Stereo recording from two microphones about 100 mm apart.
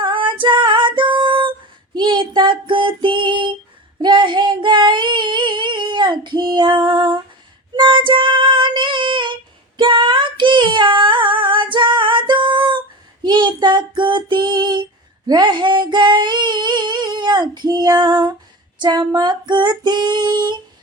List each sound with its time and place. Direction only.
0.0 s female singing: 55° right (ahead or behind)
4.0 s child singing: 50° right (ahead or behind)
7.8 s female singing: 55° right (ahead or behind)
9.7 s child singing: 55° right (ahead or behind)
15.3 s female singing: 45° right (ahead or behind)